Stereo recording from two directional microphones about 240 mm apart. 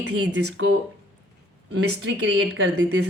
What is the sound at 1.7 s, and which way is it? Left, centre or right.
Speech, right.